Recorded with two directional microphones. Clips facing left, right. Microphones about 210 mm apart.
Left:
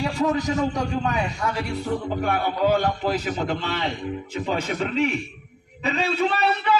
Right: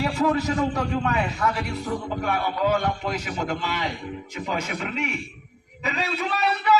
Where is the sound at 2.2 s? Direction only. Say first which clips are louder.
Left 2 dB; 35° left (ahead or behind).